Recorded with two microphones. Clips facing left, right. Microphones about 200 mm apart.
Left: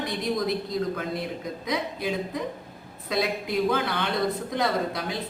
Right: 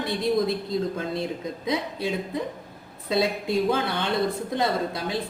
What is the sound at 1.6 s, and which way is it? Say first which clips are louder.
Speech: right 2 dB; 25° right (ahead or behind).